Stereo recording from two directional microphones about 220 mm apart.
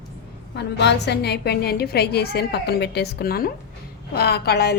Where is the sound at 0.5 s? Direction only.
50° left (ahead or behind).